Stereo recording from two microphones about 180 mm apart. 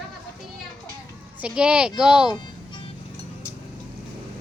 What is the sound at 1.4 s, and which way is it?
Speech, 5° right (ahead or behind).